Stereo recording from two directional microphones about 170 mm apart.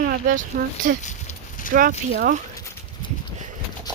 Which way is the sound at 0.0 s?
55° right (ahead or behind).